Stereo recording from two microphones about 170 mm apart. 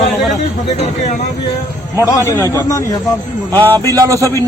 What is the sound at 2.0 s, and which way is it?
Speech, 15° left (ahead or behind).